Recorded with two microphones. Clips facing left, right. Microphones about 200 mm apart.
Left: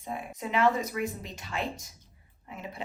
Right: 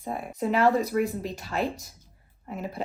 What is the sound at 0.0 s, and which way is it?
Speech, 45° right (ahead or behind).